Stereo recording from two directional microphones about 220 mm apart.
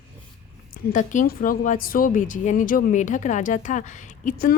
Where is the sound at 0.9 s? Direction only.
35° left (ahead or behind).